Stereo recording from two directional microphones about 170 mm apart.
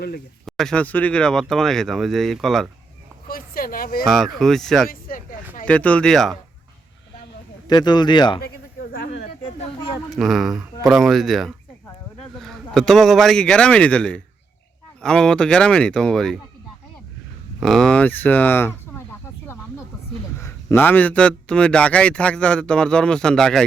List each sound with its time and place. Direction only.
0.4 s speech: centre (ahead or behind)
3.2 s a sound: 60° left (ahead or behind)
4.0 s speech: centre (ahead or behind)
4.9 s a sound: 55° left (ahead or behind)
5.6 s speech: 10° left (ahead or behind)
7.7 s speech: 25° left (ahead or behind)
8.4 s bleat: 60° left (ahead or behind)
10.2 s speech: centre (ahead or behind)
17.6 s a man's voice: 5° left (ahead or behind)
20.4 s a man's voice: 15° left (ahead or behind)